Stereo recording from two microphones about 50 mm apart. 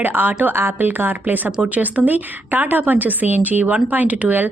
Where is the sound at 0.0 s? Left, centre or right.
Right.